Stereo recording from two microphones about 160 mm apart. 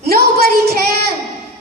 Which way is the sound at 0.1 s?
70° right (ahead or behind).